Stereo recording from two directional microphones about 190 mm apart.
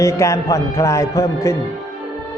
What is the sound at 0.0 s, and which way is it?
Speech, 15° left (ahead or behind).